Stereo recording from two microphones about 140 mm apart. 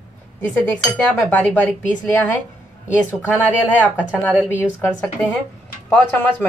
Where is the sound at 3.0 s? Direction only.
10° left (ahead or behind).